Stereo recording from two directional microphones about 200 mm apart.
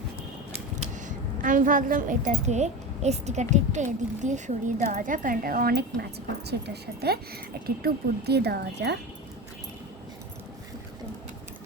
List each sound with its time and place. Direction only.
0.8 s a woman's voice: 40° right (ahead or behind); by 9.0 s 55° right (ahead or behind)